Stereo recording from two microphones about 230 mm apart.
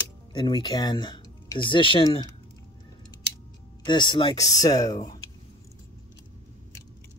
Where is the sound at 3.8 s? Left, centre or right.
Centre.